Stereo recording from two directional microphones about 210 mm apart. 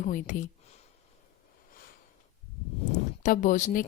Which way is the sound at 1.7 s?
45° left (ahead or behind).